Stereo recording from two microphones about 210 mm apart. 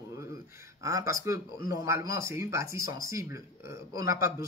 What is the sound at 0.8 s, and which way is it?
Speech, 15° right (ahead or behind).